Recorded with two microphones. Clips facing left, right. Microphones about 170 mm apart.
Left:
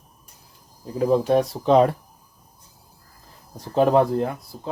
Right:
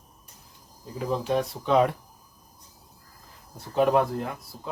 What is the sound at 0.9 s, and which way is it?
Speech, 40° left (ahead or behind).